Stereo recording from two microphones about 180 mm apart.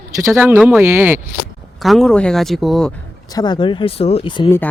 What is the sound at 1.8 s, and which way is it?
Speech, centre (ahead or behind).